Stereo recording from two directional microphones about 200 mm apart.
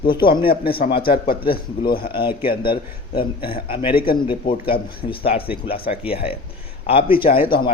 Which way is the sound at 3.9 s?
50° left (ahead or behind).